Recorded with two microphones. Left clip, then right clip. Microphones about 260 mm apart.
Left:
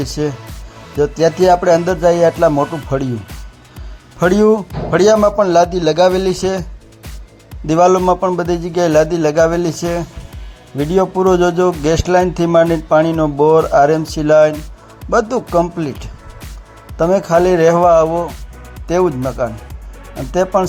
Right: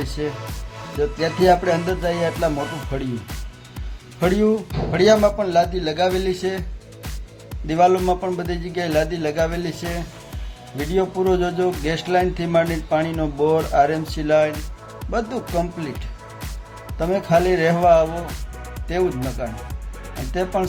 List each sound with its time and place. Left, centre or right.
1.2 s speech: left
4.2 s speech: left
7.7 s speech: left
19.4 s speech: left